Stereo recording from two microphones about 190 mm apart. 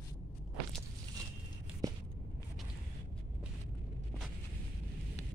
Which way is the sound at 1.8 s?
20° right (ahead or behind).